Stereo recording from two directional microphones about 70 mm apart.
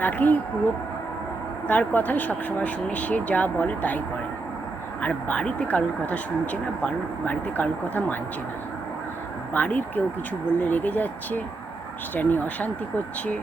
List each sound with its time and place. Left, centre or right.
0.0 s speech: left
1.6 s speech: left
5.0 s speech: centre
9.5 s speech: left